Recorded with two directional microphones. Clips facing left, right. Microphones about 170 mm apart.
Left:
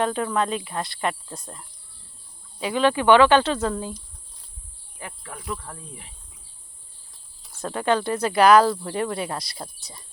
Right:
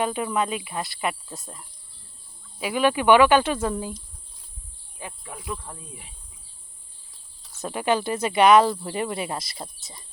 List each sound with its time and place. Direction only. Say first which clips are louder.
0.0 s cricket: left 1 dB; 10° right (ahead or behind)
4.9 s insect: even; 15° right (ahead or behind)
5.5 s cricket: left 1 dB; 15° right (ahead or behind)
7.6 s cricket: left 1 dB; 10° right (ahead or behind)
8.2 s speech: left 1 dB; centre (ahead or behind)